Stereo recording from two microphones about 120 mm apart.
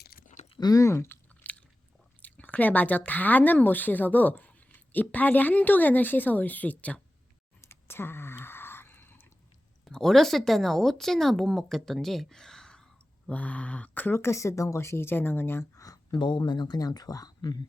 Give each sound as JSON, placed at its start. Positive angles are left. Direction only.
{"t": 0.6, "sound": "chewing", "side_deg": 30}
{"t": 2.2, "sound": "speech", "side_deg": 15}
{"t": 7.6, "sound": "a sound", "side_deg": 20}
{"t": 9.8, "sound": "speech", "side_deg": 5}
{"t": 15.8, "sound": "speech", "side_deg": 35}